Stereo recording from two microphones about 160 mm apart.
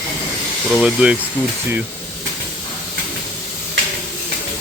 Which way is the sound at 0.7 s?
5° right (ahead or behind).